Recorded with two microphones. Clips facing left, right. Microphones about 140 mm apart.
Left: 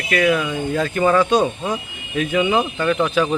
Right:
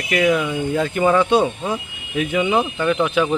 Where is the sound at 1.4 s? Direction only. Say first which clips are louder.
Even; 5° right (ahead or behind).